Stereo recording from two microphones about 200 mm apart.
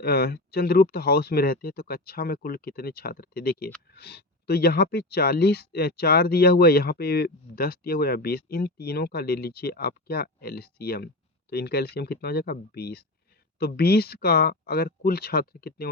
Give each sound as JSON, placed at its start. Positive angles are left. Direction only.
{"t": 0.0, "sound": "speech", "side_deg": 50}